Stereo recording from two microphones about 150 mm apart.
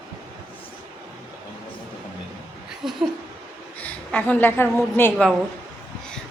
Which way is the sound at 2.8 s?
Centre (ahead or behind).